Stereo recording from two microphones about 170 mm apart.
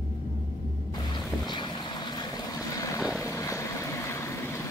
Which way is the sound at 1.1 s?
25° left (ahead or behind).